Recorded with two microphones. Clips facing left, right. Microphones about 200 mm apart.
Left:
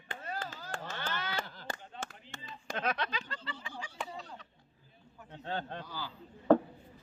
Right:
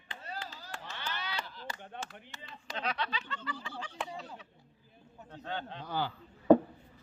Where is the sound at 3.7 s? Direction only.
10° left (ahead or behind).